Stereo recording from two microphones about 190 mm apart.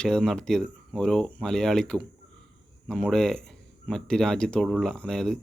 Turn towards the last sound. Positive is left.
turn(degrees=5)  # may be behind; listen again after turning